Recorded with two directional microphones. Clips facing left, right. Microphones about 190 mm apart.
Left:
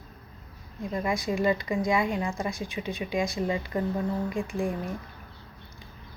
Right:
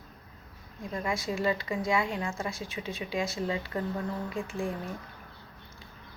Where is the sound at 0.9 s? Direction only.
15° left (ahead or behind).